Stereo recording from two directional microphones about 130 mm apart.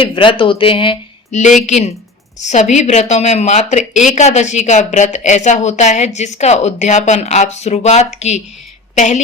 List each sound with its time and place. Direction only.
0.0 s speech: 40° left (ahead or behind)
1.3 s a woman's voice: 65° left (ahead or behind)